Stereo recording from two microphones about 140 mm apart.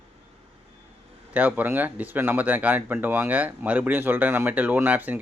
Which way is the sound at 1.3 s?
15° right (ahead or behind).